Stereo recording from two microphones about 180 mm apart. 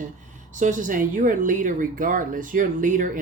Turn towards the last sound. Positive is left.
turn(degrees=-45)  # may be behind; listen again after turning